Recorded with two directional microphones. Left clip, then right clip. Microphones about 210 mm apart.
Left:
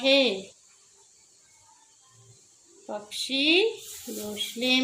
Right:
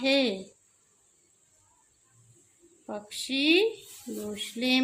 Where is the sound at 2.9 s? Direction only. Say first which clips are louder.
Left 3 dB; 30° right (ahead or behind).